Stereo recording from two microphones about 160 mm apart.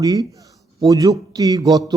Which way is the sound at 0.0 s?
20° right (ahead or behind).